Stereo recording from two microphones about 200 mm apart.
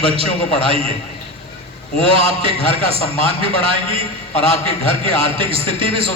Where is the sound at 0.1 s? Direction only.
30° right (ahead or behind).